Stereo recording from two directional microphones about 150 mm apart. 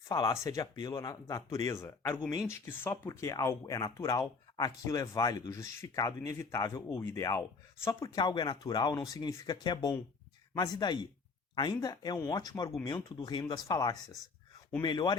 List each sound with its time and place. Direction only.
0.1 s speech: 25° left (ahead or behind)